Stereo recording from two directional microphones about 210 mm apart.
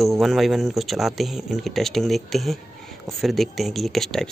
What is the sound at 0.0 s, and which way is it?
Speech, centre (ahead or behind).